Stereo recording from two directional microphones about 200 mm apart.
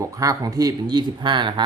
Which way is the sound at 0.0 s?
15° right (ahead or behind).